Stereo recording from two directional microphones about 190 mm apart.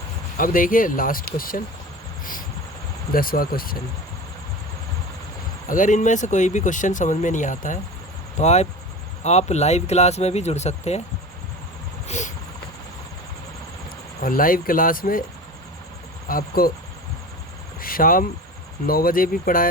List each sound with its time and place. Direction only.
0.3 s speech: 45° left (ahead or behind)
3.1 s speech: 50° left (ahead or behind)
5.6 s speech: 45° left (ahead or behind)
12.0 s a sound: 40° left (ahead or behind)
14.2 s speech: 45° left (ahead or behind)
16.3 s speech: 50° left (ahead or behind)
17.7 s vehicle: 50° left (ahead or behind)
18.9 s speech: 50° left (ahead or behind)